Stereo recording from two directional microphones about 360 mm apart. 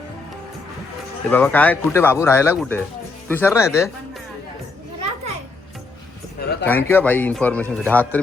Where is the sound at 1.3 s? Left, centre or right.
Centre.